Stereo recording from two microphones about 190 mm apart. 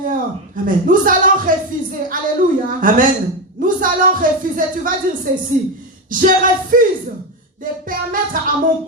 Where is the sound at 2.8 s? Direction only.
45° right (ahead or behind).